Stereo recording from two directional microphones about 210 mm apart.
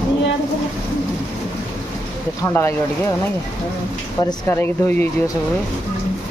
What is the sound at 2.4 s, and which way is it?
Speech, 10° left (ahead or behind).